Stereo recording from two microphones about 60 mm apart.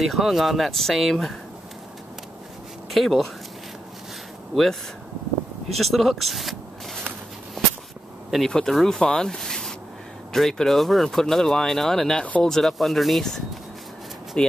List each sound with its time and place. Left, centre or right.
0.0 s speech: centre
2.9 s speech: centre
5.8 s speech: centre
8.3 s speech: centre
14.3 s speech: centre